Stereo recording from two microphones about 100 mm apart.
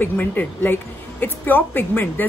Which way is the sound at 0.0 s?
20° left (ahead or behind).